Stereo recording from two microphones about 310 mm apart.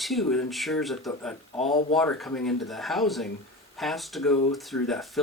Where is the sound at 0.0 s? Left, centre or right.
Centre.